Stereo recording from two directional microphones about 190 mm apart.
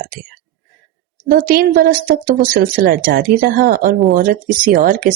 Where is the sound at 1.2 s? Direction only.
50° right (ahead or behind).